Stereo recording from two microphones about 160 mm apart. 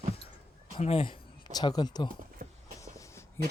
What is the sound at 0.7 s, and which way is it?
Speech, 40° left (ahead or behind).